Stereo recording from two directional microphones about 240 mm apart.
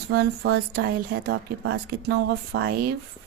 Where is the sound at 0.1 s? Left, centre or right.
Right.